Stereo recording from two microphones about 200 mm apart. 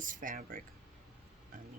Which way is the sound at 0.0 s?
40° right (ahead or behind).